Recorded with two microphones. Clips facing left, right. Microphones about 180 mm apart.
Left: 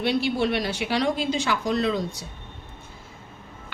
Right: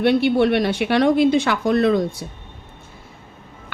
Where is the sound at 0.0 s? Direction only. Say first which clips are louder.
Right 7 dB; 60° right (ahead or behind).